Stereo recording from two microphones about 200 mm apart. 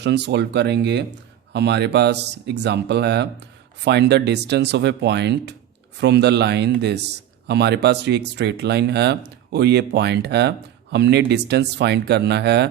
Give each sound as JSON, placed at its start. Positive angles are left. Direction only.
{"t": 0.0, "sound": "speech", "side_deg": -55}